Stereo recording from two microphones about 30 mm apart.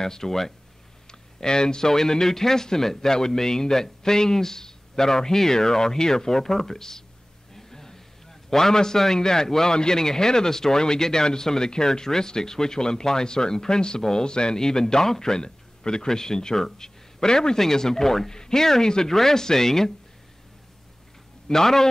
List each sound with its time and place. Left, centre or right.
0.0 s speech: centre
7.5 s a sound: centre
9.8 s a man's voice: left
21.5 s speech: centre